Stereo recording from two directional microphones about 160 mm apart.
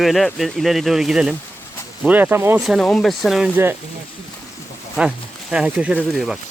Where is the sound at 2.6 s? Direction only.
Centre (ahead or behind).